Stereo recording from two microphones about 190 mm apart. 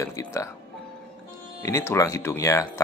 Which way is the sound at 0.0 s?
15° left (ahead or behind).